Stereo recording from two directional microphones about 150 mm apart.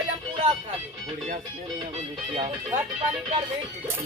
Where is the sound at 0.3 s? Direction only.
35° right (ahead or behind).